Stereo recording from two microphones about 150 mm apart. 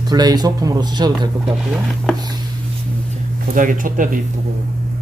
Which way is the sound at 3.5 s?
65° right (ahead or behind).